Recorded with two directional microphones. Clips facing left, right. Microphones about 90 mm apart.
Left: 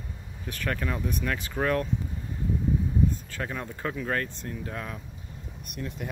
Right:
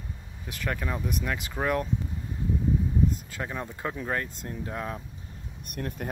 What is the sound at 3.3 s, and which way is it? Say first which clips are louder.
Speech: even; 15° right (ahead or behind).